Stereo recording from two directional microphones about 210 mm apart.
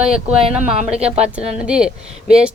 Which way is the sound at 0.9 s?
30° right (ahead or behind).